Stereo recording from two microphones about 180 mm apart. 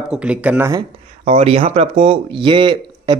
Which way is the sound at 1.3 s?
35° right (ahead or behind).